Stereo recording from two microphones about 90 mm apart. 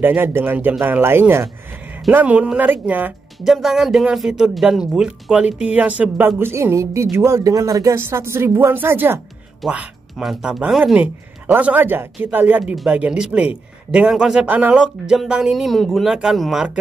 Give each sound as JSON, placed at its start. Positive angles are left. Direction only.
{"t": 0.0, "sound": "a man's voice", "side_deg": -25}
{"t": 3.3, "sound": "speech", "side_deg": 0}
{"t": 9.7, "sound": "speech", "side_deg": -10}
{"t": 10.2, "sound": "speech", "side_deg": 0}
{"t": 10.8, "sound": "a man's voice", "side_deg": -15}
{"t": 14.4, "sound": "speech", "side_deg": -15}